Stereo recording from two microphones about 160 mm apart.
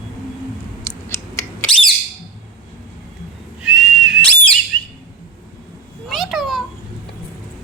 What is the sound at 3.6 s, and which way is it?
Whistle, centre (ahead or behind).